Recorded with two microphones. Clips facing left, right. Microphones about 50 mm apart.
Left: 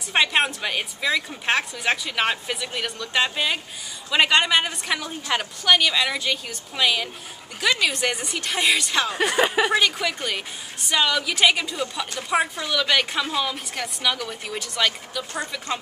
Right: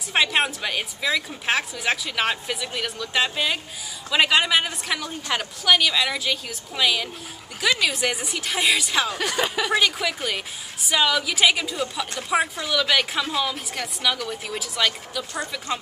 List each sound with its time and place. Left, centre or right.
0.1 s a woman's voice: centre
9.1 s speech: centre
9.7 s a woman's voice: centre